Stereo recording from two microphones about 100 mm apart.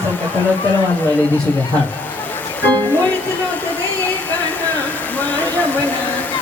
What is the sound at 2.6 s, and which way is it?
Speech, 15° left (ahead or behind).